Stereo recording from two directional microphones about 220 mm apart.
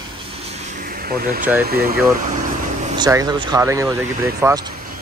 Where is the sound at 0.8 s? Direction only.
40° right (ahead or behind).